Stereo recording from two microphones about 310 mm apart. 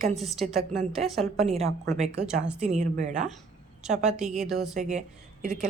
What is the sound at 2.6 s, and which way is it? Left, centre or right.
Speech, right.